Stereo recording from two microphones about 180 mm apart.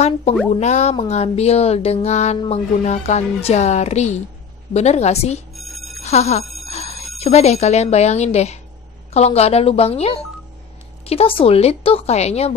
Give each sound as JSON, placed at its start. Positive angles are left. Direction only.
{"t": 0.5, "sound": "speech", "side_deg": 40}
{"t": 5.5, "sound": "music", "side_deg": 0}
{"t": 5.9, "sound": "speech", "side_deg": 35}
{"t": 6.6, "sound": "bicycle bell", "side_deg": 35}
{"t": 7.2, "sound": "speech", "side_deg": 35}